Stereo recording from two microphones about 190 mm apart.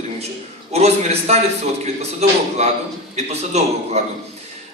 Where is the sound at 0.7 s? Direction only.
35° right (ahead or behind).